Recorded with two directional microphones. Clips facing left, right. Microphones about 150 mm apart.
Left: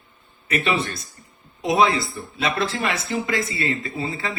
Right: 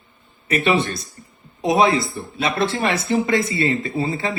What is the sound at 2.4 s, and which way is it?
Speech, 35° right (ahead or behind).